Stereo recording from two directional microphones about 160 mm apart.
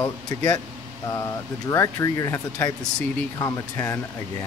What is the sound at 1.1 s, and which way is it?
Speech, 20° left (ahead or behind).